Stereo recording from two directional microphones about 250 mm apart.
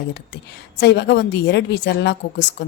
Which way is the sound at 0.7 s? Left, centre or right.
Left.